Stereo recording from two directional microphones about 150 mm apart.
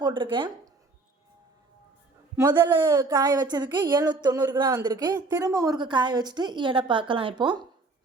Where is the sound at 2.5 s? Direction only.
30° right (ahead or behind).